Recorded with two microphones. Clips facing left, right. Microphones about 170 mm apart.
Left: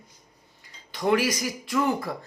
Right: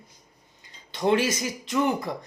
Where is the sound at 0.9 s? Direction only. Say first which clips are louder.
Right 1 dB; 25° right (ahead or behind).